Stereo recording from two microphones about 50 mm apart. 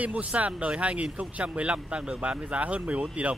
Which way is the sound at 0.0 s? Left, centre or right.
Right.